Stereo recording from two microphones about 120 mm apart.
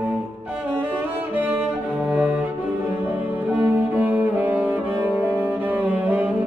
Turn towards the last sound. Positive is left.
turn(degrees=-15)  # may be behind; listen again after turning